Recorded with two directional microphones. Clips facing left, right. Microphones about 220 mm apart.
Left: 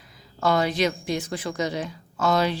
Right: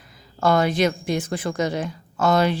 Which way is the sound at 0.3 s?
50° right (ahead or behind).